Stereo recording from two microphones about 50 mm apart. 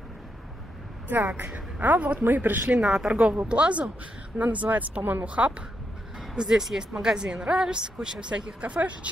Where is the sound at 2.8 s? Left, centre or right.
Centre.